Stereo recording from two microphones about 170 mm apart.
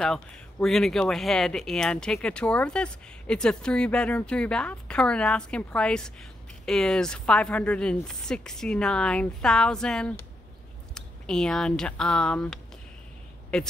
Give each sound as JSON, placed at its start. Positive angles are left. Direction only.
{"t": 0.0, "sound": "speech", "side_deg": 5}